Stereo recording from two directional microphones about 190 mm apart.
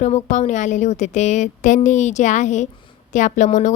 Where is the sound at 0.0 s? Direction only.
40° left (ahead or behind).